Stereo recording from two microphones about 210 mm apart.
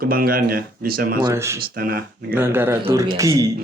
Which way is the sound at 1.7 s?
45° right (ahead or behind).